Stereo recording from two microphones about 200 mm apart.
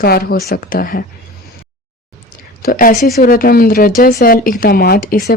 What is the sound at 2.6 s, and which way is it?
Speech, 45° left (ahead or behind).